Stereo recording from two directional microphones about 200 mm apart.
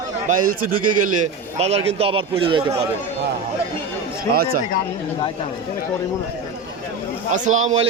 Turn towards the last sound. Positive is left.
turn(degrees=-35)  # may be behind; listen again after turning